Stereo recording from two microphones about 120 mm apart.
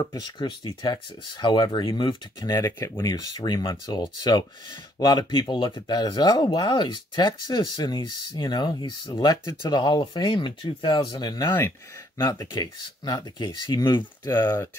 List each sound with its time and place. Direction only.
0.0 s speech: 30° left (ahead or behind)